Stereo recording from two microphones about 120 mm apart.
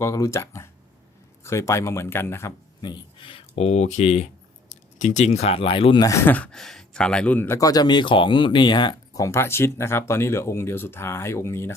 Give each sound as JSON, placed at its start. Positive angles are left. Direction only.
{"t": 0.0, "sound": "speech", "side_deg": 25}
{"t": 2.8, "sound": "speech", "side_deg": 40}
{"t": 6.0, "sound": "speech", "side_deg": 25}
{"t": 7.6, "sound": "speech", "side_deg": 30}